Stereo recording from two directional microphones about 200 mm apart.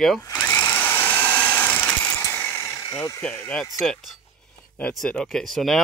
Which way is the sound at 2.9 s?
15° left (ahead or behind).